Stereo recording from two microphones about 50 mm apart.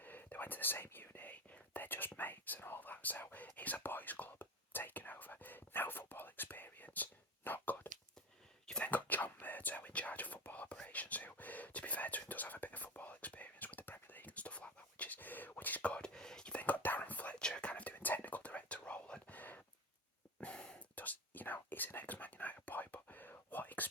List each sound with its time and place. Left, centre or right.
0.0 s whispering: left
1.3 s whispering: left
8.8 s whispering: left; by 16.6 s centre
16.6 s whispering: left
20.4 s a sound: centre
20.9 s whispering: left